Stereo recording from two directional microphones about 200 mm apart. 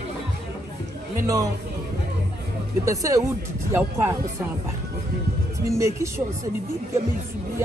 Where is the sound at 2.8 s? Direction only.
15° right (ahead or behind).